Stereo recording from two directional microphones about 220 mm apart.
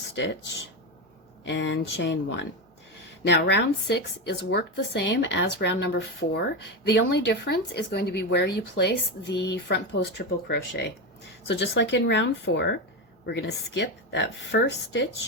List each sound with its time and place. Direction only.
1.5 s a woman's voice: 55° left (ahead or behind)